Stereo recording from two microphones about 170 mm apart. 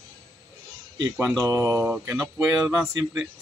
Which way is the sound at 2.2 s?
Centre (ahead or behind).